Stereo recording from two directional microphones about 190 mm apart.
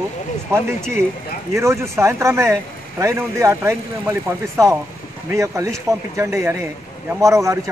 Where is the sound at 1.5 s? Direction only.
15° right (ahead or behind).